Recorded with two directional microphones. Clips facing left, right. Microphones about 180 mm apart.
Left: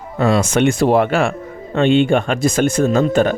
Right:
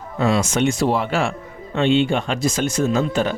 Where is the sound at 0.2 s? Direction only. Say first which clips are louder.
Left 4 dB; 55° left (ahead or behind).